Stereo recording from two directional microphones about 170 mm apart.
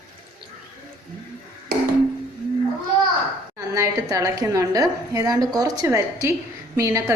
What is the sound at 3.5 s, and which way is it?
A woman's voice, 20° right (ahead or behind).